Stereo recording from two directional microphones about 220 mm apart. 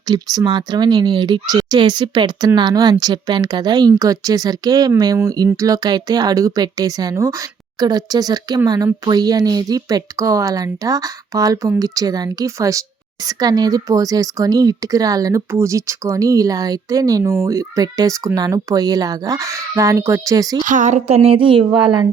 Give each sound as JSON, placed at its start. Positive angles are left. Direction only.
{"t": 0.0, "sound": "a woman's voice", "side_deg": -15}
{"t": 20.7, "sound": "speech", "side_deg": -35}